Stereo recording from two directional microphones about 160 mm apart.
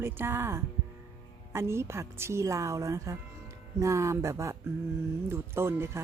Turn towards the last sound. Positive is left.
turn(degrees=-15)  # may be behind; listen again after turning